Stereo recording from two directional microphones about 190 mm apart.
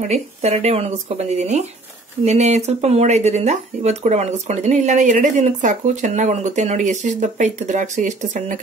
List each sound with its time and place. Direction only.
0.1 s speech: 35° right (ahead or behind)
2.2 s speech: 35° right (ahead or behind)